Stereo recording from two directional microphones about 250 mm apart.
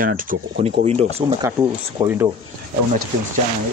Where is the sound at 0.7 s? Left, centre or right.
Right.